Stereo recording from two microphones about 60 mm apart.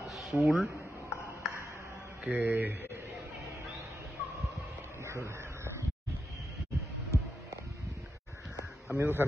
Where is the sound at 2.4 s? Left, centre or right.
Right.